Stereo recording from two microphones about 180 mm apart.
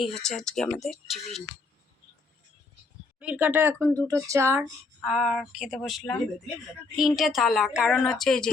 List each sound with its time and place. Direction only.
0.0 s speech: centre (ahead or behind)
3.2 s speech: 10° right (ahead or behind)
5.0 s speech: 5° right (ahead or behind)